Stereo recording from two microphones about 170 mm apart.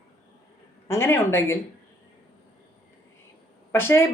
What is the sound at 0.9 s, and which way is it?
Speech, 15° left (ahead or behind).